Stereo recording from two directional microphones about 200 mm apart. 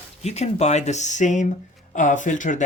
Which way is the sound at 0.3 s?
35° left (ahead or behind).